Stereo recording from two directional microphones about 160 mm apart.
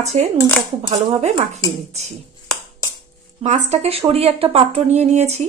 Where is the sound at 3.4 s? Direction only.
45° right (ahead or behind).